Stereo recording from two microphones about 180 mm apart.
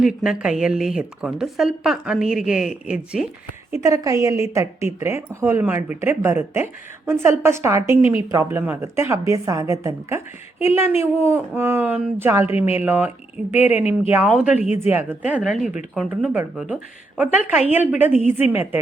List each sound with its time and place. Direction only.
0.0 s a woman's voice: 5° right (ahead or behind)
3.8 s speech: 20° right (ahead or behind)
12.5 s speech: 35° left (ahead or behind)
12.7 s speech: 10° right (ahead or behind)
13.6 s speech: 35° left (ahead or behind)
14.8 s a woman's voice: 10° right (ahead or behind)